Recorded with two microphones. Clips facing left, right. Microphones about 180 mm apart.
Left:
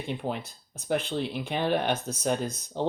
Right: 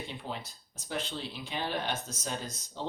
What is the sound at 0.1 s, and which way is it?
Speech, 60° left (ahead or behind).